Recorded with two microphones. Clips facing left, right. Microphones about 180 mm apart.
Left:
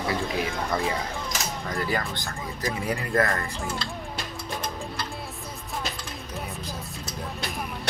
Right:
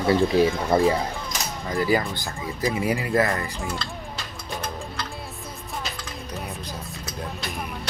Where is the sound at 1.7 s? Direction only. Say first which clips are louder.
Right 7 dB; 5° right (ahead or behind).